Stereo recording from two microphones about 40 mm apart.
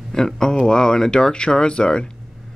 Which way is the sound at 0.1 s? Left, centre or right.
Centre.